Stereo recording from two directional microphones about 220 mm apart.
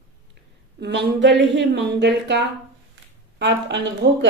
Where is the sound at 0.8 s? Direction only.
50° right (ahead or behind).